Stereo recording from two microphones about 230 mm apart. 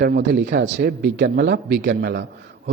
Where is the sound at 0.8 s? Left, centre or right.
Right.